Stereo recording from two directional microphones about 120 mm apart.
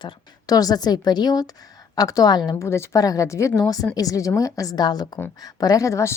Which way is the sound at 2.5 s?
20° left (ahead or behind).